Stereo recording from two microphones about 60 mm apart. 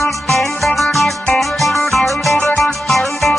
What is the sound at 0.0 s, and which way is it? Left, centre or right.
Music, centre.